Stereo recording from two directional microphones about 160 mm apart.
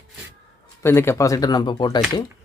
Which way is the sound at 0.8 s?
15° left (ahead or behind).